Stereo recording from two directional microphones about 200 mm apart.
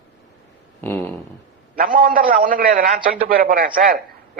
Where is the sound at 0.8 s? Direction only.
10° left (ahead or behind).